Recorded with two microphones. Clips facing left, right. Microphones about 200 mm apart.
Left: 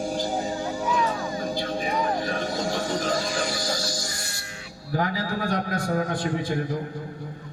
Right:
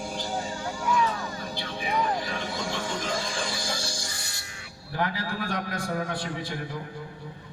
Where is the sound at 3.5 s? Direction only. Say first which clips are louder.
Left 4 dB; 35° left (ahead or behind).